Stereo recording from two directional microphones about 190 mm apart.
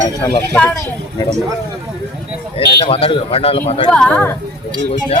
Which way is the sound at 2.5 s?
30° left (ahead or behind).